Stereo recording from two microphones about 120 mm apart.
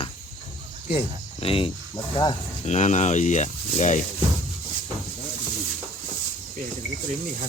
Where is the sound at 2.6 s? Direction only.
70° left (ahead or behind).